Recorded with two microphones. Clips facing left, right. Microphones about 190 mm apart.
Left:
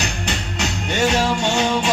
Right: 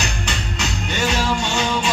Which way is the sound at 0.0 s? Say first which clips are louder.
Left 1 dB; 60° left (ahead or behind).